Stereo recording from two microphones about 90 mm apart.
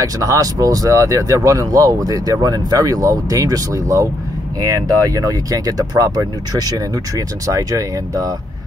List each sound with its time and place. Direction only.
0.0 s speech: 40° right (ahead or behind)